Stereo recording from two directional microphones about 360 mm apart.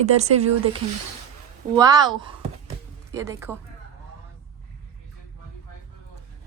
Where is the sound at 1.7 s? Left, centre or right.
Centre.